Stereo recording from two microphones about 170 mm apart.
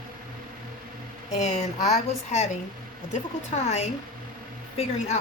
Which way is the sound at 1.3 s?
45° left (ahead or behind).